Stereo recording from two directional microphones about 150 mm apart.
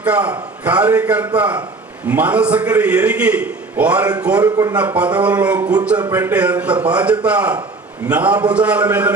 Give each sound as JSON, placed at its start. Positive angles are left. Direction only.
{"t": 0.0, "sound": "a man's voice", "side_deg": -10}
{"t": 4.4, "sound": "speech", "side_deg": -20}
{"t": 4.9, "sound": "a man's voice", "side_deg": -10}